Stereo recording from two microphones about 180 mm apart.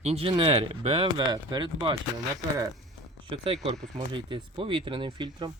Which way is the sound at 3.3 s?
30° right (ahead or behind).